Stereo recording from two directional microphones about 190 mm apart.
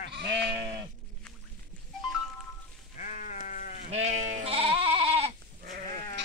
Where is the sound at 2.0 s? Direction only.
Centre (ahead or behind).